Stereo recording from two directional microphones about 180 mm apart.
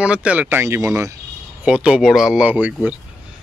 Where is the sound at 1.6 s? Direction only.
5° right (ahead or behind).